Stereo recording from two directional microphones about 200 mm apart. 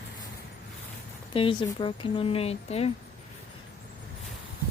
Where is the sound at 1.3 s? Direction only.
25° left (ahead or behind).